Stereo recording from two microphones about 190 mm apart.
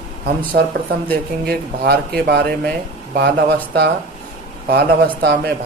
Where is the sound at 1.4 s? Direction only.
55° right (ahead or behind).